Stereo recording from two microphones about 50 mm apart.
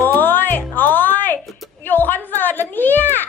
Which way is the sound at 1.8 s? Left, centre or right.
Left.